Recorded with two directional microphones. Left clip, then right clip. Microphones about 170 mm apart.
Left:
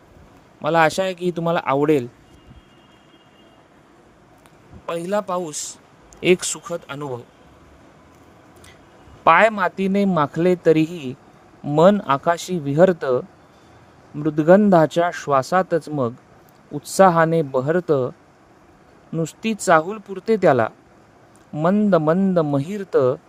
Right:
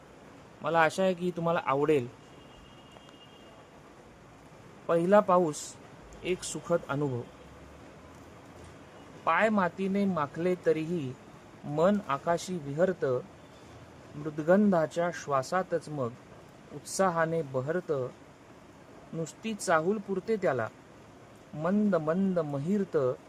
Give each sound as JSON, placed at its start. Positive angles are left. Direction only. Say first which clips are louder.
{"t": 0.6, "sound": "speech", "louder": "left 8 dB", "side_deg": 35}
{"t": 4.9, "sound": "speech", "louder": "even", "side_deg": 0}
{"t": 6.2, "sound": "speech", "louder": "left 16 dB", "side_deg": 65}
{"t": 9.2, "sound": "speech", "louder": "left 12 dB", "side_deg": 55}
{"t": 14.3, "sound": "speech", "louder": "left 12 dB", "side_deg": 50}
{"t": 19.2, "sound": "speech", "louder": "left 12 dB", "side_deg": 50}